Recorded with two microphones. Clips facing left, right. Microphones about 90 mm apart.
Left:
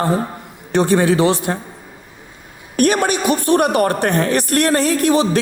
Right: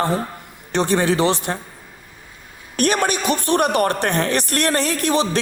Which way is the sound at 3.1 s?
20° left (ahead or behind).